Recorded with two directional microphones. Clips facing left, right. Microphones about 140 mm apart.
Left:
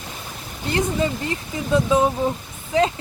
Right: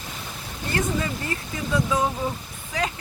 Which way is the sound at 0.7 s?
25° left (ahead or behind).